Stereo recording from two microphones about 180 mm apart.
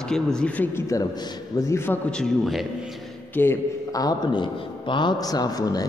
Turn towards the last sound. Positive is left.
turn(degrees=20)  # may be behind; listen again after turning